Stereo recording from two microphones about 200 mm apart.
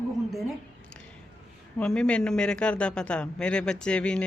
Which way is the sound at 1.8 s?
5° left (ahead or behind).